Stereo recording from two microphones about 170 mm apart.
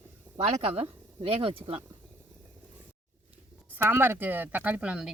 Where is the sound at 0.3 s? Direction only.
40° right (ahead or behind).